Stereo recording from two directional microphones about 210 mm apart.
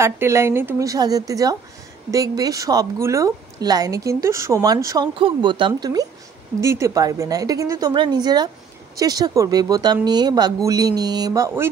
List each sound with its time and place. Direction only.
0.0 s a woman's voice: 15° right (ahead or behind)